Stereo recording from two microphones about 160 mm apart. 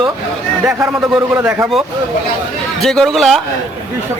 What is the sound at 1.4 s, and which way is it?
Speech, 15° right (ahead or behind).